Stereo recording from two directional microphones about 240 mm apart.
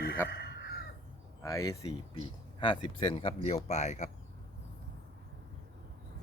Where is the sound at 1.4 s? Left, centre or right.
Centre.